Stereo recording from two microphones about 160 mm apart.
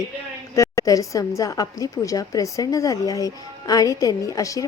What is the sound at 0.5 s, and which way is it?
A woman's voice, 20° left (ahead or behind).